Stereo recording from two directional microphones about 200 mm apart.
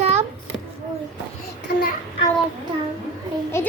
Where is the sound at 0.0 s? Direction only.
30° right (ahead or behind).